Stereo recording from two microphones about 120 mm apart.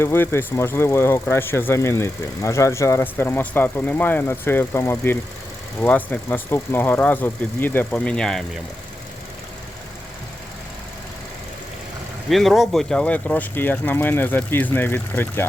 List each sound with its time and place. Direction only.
0.0 s speech: 20° left (ahead or behind)
12.3 s speech: centre (ahead or behind); by 15.4 s 15° left (ahead or behind)